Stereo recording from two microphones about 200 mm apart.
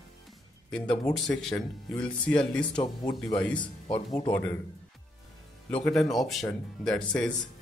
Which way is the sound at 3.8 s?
25° left (ahead or behind).